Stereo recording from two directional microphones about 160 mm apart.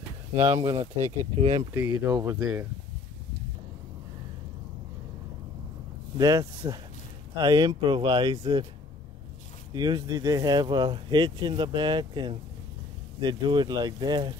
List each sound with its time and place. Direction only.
0.6 s speech: 30° right (ahead or behind)
1.7 s speech: 15° right (ahead or behind)
2.1 s speech: 25° right (ahead or behind)
6.1 s speech: 20° right (ahead or behind)
9.8 s speech: 25° right (ahead or behind)